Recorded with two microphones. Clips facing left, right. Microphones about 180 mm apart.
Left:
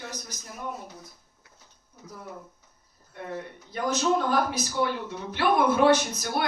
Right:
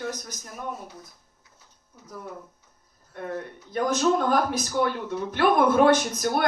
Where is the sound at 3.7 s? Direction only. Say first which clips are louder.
Right 3 dB; 50° right (ahead or behind).